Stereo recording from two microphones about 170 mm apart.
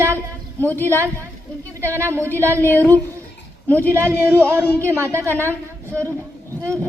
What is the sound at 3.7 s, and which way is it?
A woman's voice, 15° right (ahead or behind).